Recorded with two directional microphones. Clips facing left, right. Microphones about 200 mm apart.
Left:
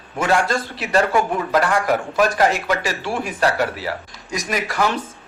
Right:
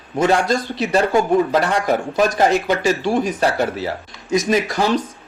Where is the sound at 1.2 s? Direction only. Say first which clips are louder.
Right 4 dB; 30° right (ahead or behind).